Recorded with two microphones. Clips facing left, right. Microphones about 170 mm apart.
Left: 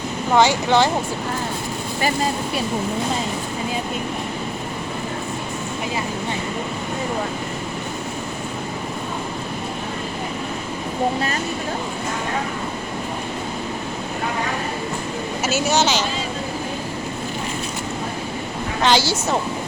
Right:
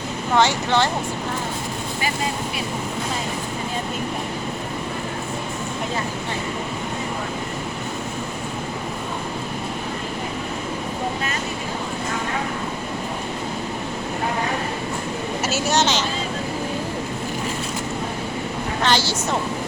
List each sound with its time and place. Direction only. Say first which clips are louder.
0.3 s speech: left 3 dB; 10° left (ahead or behind)
15.4 s speech: left 2 dB; centre (ahead or behind)
18.9 s speech: left 3 dB; 10° left (ahead or behind)